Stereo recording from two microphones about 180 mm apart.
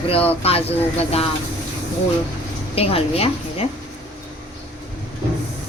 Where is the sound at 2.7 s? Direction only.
35° left (ahead or behind).